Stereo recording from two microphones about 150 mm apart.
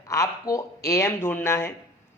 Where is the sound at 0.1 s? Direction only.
20° left (ahead or behind).